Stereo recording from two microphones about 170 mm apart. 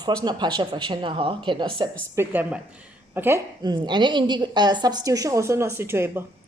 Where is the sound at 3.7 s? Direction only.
25° right (ahead or behind).